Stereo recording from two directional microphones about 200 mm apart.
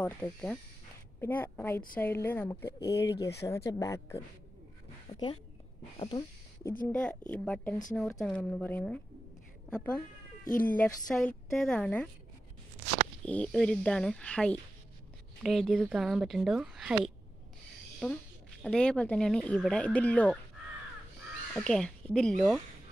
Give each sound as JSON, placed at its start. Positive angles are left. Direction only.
{"t": 0.0, "sound": "a woman's voice", "side_deg": 5}
{"t": 6.9, "sound": "speech", "side_deg": 5}
{"t": 10.4, "sound": "speech", "side_deg": 40}
{"t": 10.7, "sound": "speech", "side_deg": 10}
{"t": 13.2, "sound": "speech", "side_deg": 5}
{"t": 21.5, "sound": "speech", "side_deg": 5}